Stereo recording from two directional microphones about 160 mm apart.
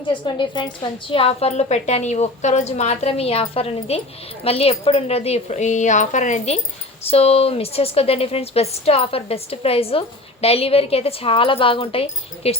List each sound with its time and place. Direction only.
0.1 s a woman's voice: 30° left (ahead or behind)